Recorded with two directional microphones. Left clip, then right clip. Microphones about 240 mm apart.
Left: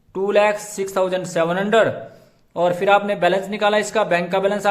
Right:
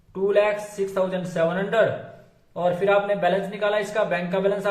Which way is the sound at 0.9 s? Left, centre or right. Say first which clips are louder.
Left 5 dB; left.